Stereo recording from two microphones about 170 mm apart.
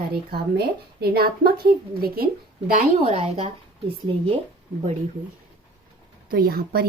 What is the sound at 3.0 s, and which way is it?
Speech, 35° right (ahead or behind).